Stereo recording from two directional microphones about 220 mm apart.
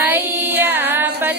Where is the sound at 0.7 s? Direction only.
10° right (ahead or behind).